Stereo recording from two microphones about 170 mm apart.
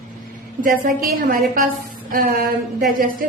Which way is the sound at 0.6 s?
55° right (ahead or behind).